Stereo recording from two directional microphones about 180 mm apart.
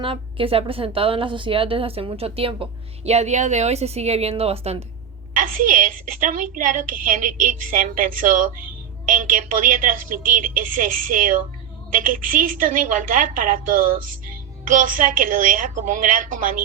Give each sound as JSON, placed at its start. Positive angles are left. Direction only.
{"t": 0.0, "sound": "a woman's voice", "side_deg": -30}
{"t": 5.3, "sound": "a woman's voice", "side_deg": -50}